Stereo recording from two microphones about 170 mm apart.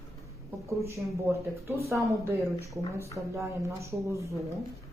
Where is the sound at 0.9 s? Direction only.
15° right (ahead or behind).